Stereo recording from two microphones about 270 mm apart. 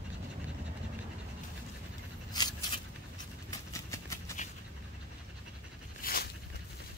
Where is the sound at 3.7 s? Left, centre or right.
Centre.